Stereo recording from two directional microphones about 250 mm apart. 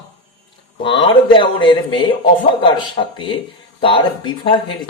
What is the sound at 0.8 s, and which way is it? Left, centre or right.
Speech, centre.